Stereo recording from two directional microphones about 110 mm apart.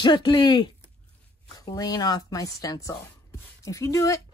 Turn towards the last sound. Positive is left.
turn(degrees=30)  # may be behind; listen again after turning